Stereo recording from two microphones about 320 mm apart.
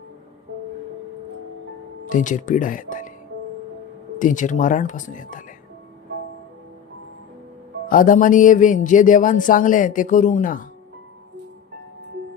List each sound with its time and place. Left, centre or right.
2.0 s speech: left
4.2 s speech: left
7.9 s speech: left